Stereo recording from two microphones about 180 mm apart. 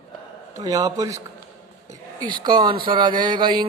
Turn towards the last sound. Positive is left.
turn(degrees=-25)  # may be behind; listen again after turning